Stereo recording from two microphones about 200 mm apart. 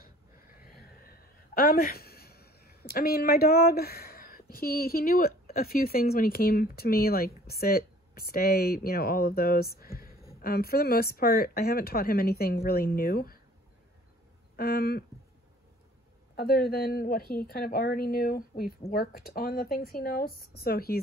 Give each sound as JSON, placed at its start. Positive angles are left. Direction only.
{"t": 0.7, "sound": "speech", "side_deg": 50}
{"t": 14.6, "sound": "speech", "side_deg": 50}
{"t": 16.3, "sound": "speech", "side_deg": 50}